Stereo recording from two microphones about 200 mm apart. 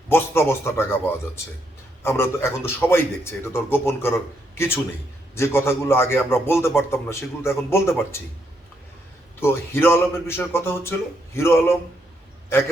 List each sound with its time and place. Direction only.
0.1 s a man's voice: 10° left (ahead or behind)
2.0 s a man's voice: 10° left (ahead or behind)
9.4 s a man's voice: 10° left (ahead or behind)